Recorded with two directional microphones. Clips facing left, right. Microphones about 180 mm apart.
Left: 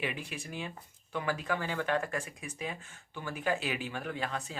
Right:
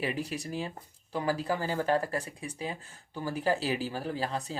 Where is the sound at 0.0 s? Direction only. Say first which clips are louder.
Right 5 dB; 35° right (ahead or behind).